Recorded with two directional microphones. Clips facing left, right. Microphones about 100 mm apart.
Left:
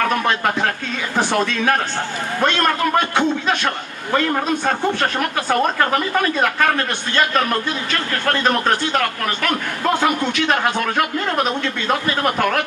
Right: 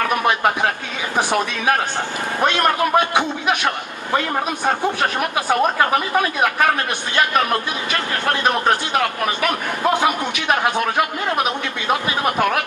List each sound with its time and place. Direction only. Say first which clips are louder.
0.1 s a man's voice: right 1 dB; 15° right (ahead or behind)